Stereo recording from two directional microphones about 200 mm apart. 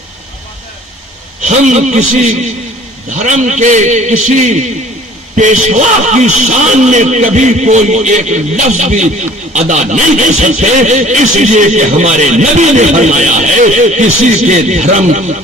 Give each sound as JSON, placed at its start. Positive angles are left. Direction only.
{"t": 1.4, "sound": "a man's voice", "side_deg": -35}